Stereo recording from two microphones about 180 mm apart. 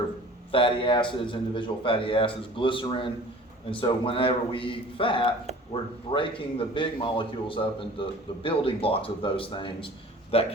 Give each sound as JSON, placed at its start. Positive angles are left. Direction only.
{"t": 0.5, "sound": "a man's voice", "side_deg": 30}